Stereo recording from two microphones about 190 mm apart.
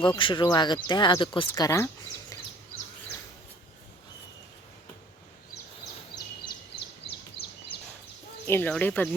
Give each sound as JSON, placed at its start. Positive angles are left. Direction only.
{"t": 0.0, "sound": "speech", "side_deg": 25}
{"t": 6.1, "sound": "a sound", "side_deg": 25}
{"t": 8.4, "sound": "speech", "side_deg": 10}